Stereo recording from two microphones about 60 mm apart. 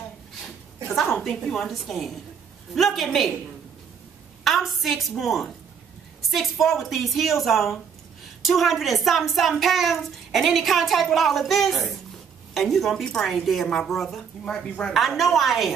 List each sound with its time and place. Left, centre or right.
0.9 s a woman's voice: centre
4.5 s a woman's voice: centre
14.4 s speech: centre
15.0 s a woman's voice: centre